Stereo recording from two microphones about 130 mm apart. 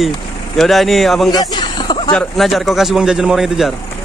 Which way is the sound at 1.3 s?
35° left (ahead or behind).